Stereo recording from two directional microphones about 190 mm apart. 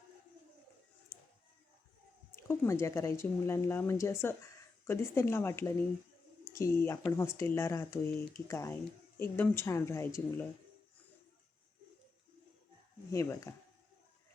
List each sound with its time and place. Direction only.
2.3 s speech: 15° left (ahead or behind)
13.1 s speech: 15° left (ahead or behind)